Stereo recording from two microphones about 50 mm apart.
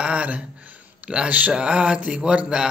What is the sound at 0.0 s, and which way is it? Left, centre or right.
Speech, right.